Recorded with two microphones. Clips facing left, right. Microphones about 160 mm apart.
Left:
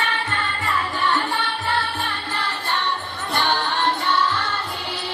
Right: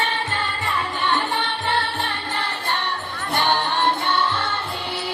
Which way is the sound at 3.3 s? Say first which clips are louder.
Right 1 dB; 20° right (ahead or behind).